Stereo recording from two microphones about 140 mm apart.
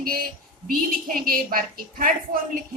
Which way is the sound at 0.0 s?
90° right.